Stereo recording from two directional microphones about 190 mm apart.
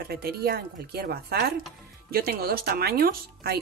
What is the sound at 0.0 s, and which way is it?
Speech, 55° right (ahead or behind).